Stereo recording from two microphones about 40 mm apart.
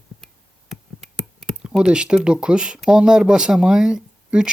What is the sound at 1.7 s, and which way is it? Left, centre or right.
Speech, right.